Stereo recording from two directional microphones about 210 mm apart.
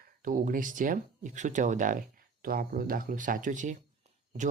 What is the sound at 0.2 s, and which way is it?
Speech, 40° right (ahead or behind).